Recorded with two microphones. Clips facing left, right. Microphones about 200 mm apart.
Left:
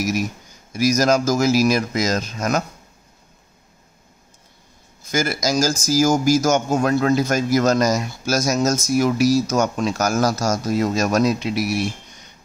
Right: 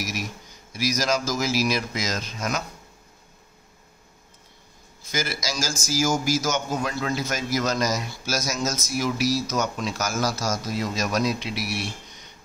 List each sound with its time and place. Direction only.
0.7 s speech: 45° left (ahead or behind)
5.0 s speech: 50° left (ahead or behind)